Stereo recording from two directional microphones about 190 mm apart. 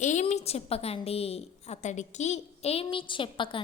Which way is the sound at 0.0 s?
40° left (ahead or behind).